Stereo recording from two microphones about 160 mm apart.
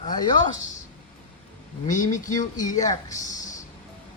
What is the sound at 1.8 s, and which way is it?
Speech, 50° left (ahead or behind).